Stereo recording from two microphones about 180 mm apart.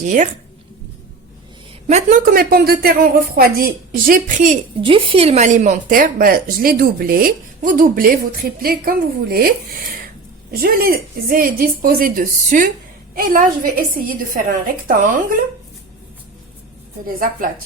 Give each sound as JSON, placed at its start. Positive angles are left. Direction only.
{"t": 0.0, "sound": "speech", "side_deg": -45}
{"t": 1.9, "sound": "speech", "side_deg": -40}
{"t": 2.3, "sound": "a woman's voice", "side_deg": -55}
{"t": 4.8, "sound": "speech", "side_deg": -30}
{"t": 10.5, "sound": "speech", "side_deg": -55}
{"t": 17.2, "sound": "speech", "side_deg": -50}